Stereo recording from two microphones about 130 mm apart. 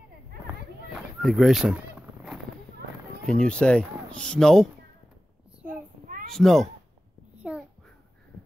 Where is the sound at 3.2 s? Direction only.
5° left (ahead or behind).